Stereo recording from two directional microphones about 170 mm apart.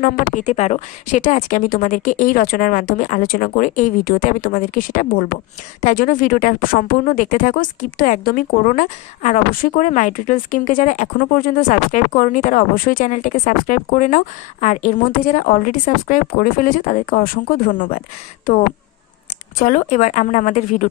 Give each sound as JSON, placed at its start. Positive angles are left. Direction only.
{"t": 0.0, "sound": "a woman's voice", "side_deg": 50}
{"t": 19.6, "sound": "a woman's voice", "side_deg": 50}